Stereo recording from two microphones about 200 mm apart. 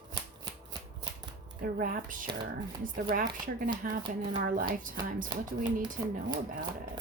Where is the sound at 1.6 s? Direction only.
45° right (ahead or behind).